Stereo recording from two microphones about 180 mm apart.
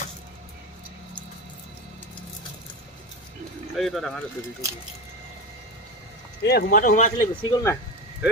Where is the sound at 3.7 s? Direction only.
Centre (ahead or behind).